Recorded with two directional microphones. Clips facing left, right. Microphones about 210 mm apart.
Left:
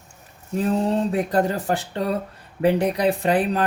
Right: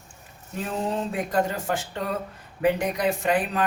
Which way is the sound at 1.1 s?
35° left (ahead or behind).